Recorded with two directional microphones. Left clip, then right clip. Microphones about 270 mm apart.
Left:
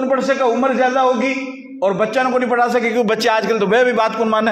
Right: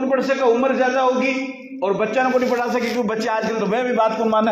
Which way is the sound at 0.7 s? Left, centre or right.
Left.